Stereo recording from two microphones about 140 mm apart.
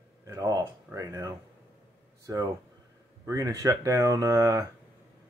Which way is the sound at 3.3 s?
25° right (ahead or behind).